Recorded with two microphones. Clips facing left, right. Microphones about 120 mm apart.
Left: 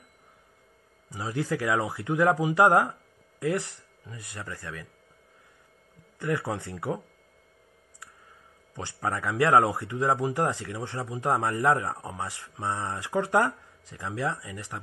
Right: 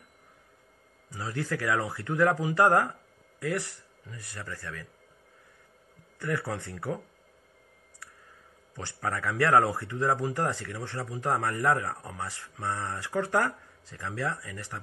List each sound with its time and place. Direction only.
1.1 s speech: 15° left (ahead or behind)
6.1 s speech: 20° left (ahead or behind)
8.7 s speech: 20° left (ahead or behind)